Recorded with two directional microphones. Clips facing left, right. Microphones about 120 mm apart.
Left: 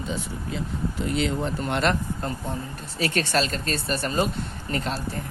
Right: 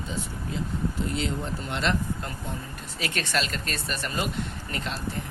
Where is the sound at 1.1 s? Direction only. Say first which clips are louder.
Left 5 dB; 65° left (ahead or behind).